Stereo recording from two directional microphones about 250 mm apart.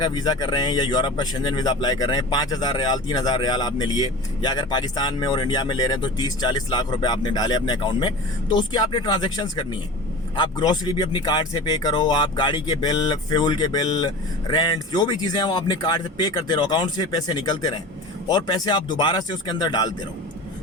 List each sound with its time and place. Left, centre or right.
0.0 s speech: centre